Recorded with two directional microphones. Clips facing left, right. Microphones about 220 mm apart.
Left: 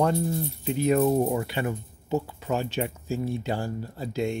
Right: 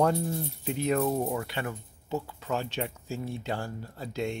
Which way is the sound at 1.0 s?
15° left (ahead or behind).